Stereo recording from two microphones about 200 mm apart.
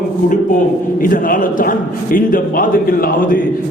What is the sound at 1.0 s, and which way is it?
A man's voice, 45° left (ahead or behind).